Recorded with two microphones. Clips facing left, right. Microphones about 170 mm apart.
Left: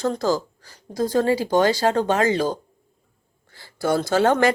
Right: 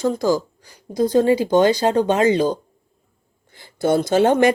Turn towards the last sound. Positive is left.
turn(degrees=-20)  # may be behind; listen again after turning